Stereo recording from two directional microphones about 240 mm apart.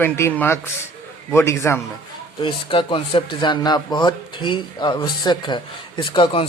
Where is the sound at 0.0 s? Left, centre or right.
Centre.